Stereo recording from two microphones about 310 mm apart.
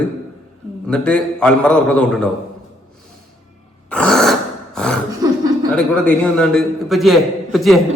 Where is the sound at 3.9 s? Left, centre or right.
Centre.